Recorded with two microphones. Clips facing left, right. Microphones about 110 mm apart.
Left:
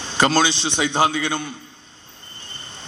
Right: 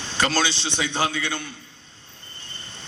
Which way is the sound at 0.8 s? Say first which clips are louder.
Left 6 dB; 15° left (ahead or behind).